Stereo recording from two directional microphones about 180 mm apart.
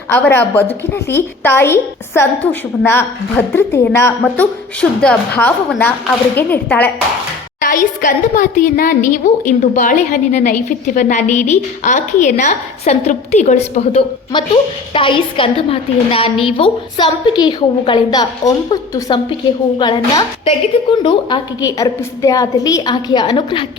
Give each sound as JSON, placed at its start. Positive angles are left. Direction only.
{"t": 0.1, "sound": "a woman's voice", "side_deg": 10}
{"t": 8.0, "sound": "a woman's voice", "side_deg": 45}